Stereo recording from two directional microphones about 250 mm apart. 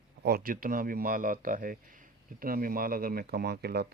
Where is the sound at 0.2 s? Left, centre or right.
Right.